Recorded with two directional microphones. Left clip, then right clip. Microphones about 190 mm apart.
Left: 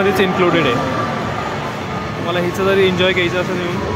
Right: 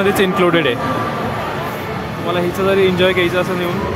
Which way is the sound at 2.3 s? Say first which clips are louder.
Even; 15° right (ahead or behind).